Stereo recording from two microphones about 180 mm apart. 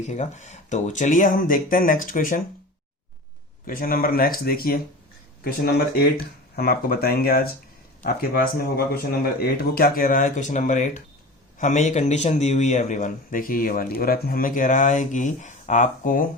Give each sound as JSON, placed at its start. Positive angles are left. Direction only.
{"t": 0.0, "sound": "a man's voice", "side_deg": 40}
{"t": 3.7, "sound": "a man's voice", "side_deg": 50}